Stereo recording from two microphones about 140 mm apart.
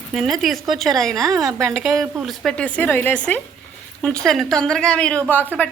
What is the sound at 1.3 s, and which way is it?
Speech, 25° right (ahead or behind).